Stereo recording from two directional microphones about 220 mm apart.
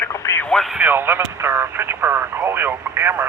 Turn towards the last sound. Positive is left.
turn(degrees=-10)  # may be behind; listen again after turning